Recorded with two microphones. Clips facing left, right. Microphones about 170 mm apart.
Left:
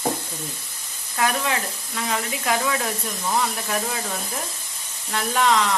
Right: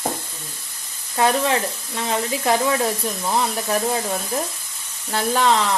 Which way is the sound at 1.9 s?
30° right (ahead or behind).